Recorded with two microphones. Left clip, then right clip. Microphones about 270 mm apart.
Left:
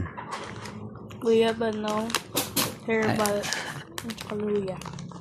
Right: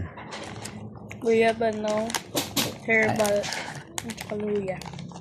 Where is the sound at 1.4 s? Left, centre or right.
Left.